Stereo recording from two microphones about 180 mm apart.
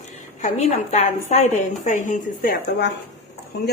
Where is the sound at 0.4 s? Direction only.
40° left (ahead or behind).